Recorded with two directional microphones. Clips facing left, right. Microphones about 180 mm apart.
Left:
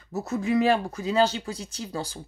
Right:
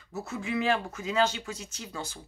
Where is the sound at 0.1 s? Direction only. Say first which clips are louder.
Left 7 dB; 40° left (ahead or behind).